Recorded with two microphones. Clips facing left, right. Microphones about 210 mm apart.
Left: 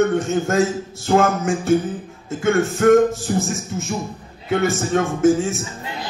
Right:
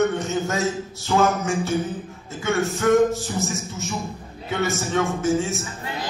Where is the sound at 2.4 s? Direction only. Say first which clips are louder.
Left 6 dB; 50° left (ahead or behind).